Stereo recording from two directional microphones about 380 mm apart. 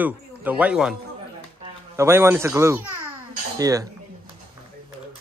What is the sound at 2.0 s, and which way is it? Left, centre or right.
Speech, centre.